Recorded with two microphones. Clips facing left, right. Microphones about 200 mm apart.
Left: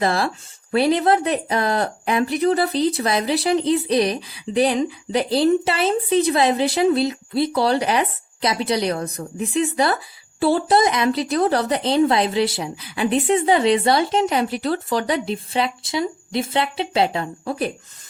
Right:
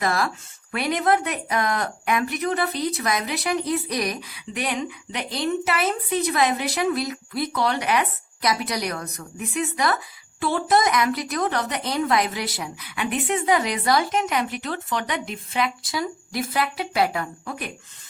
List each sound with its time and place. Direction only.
0.0 s speech: 30° left (ahead or behind)